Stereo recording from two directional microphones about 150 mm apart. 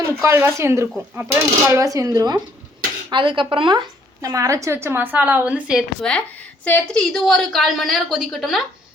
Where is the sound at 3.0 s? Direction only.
35° right (ahead or behind); by 5.9 s 5° right (ahead or behind).